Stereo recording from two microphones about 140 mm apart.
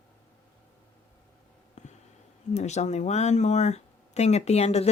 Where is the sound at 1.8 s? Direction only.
55° left (ahead or behind).